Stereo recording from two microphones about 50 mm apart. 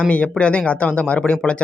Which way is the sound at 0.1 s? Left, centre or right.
Left.